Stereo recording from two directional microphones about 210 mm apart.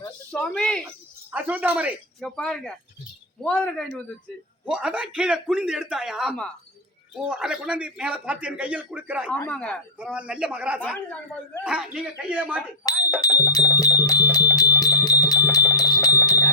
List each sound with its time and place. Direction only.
0.3 s a sound: 5° left (ahead or behind)
1.3 s a man's voice: 10° right (ahead or behind)
9.3 s a man's voice: 5° left (ahead or behind)
10.0 s a man's voice: 5° right (ahead or behind)
12.8 s music: 15° left (ahead or behind)